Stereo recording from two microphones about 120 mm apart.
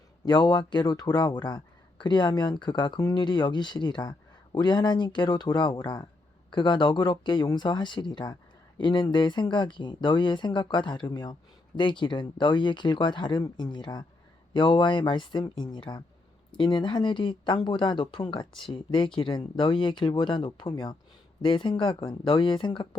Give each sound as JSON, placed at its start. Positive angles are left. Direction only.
{"t": 0.3, "sound": "speech", "side_deg": 35}